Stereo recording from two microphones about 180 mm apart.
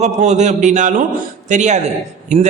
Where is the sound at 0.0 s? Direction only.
40° right (ahead or behind).